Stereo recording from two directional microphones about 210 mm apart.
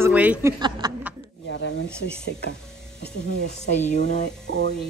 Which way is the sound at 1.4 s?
55° left (ahead or behind).